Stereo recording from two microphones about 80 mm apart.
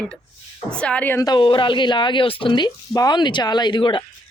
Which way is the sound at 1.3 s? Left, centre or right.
Left.